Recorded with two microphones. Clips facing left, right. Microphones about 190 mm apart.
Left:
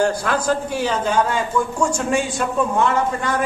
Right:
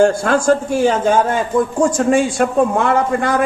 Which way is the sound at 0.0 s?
45° right (ahead or behind).